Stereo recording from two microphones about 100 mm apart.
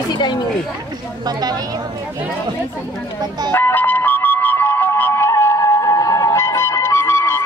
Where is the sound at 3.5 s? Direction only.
20° left (ahead or behind).